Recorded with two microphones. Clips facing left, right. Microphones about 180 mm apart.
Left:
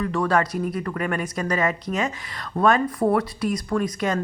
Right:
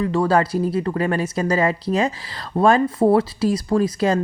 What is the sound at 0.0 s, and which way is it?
A woman's voice, 25° right (ahead or behind).